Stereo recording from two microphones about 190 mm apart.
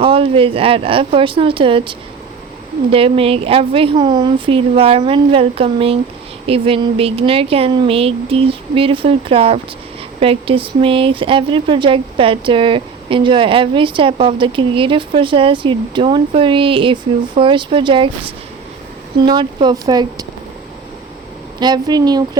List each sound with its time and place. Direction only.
0.0 s speech: 30° right (ahead or behind)
19.2 s speech: 25° right (ahead or behind)
21.6 s speech: 20° right (ahead or behind)